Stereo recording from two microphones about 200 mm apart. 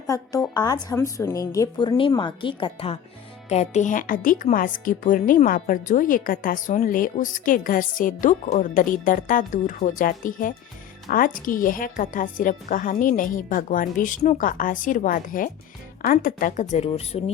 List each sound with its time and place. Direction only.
0.1 s a woman's voice: 15° left (ahead or behind)